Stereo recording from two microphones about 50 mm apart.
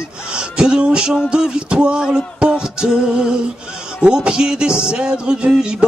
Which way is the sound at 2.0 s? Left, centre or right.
Centre.